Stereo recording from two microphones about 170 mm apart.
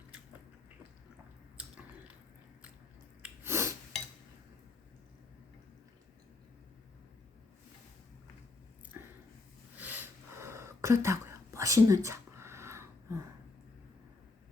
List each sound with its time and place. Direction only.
1.5 s biting: 5° right (ahead or behind)
3.2 s sneeze: 15° right (ahead or behind)
8.9 s a sound: 15° right (ahead or behind)